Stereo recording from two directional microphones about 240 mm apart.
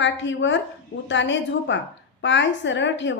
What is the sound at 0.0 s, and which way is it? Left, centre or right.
A woman's voice, left.